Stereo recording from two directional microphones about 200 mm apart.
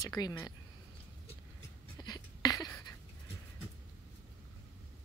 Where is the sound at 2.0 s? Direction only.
20° left (ahead or behind).